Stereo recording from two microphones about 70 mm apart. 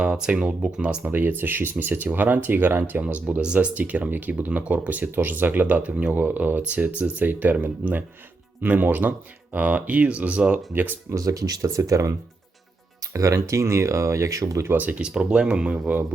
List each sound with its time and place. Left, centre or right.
0.0 s speech: centre
1.1 s speech: right
11.1 s speech: right
13.1 s speech: right
14.6 s speech: right